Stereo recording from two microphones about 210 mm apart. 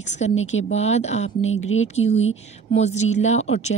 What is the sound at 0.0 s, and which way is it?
Speech, 35° left (ahead or behind).